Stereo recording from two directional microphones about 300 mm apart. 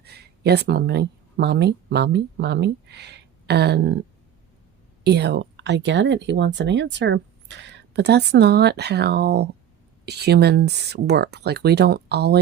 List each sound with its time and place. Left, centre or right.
0.0 s speech: right
5.0 s speech: right